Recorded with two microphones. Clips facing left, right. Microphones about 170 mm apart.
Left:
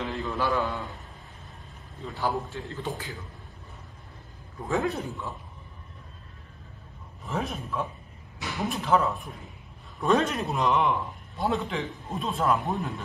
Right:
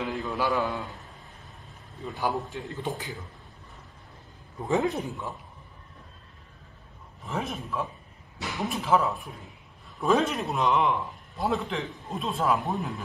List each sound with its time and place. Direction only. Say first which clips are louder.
0.0 s a sound: even; centre (ahead or behind)
0.5 s a man's voice: even; centre (ahead or behind)
2.5 s a man's voice: right 1 dB; 20° right (ahead or behind)
4.6 s a man's voice: right 2 dB; 20° right (ahead or behind)
7.2 s a man's voice: left 1 dB; centre (ahead or behind)